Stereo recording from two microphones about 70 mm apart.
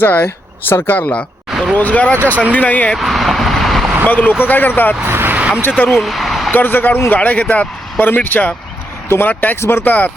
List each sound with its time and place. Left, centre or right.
0.0 s speech: left
1.5 s a sound: centre
1.7 s speech: left
3.0 s vehicle: centre
4.0 s speech: left
5.0 s vehicle: right
5.4 s a sound: centre
5.9 s speech: centre
6.5 s speech: left
9.3 s speech: left